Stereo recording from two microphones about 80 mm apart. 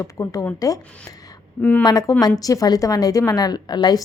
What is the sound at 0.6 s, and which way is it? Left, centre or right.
Speech, left.